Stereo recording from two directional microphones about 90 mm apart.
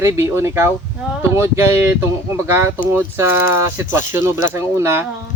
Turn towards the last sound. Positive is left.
turn(degrees=-30)  # may be behind; listen again after turning